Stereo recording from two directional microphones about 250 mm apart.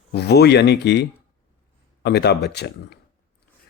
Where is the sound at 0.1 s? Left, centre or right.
Left.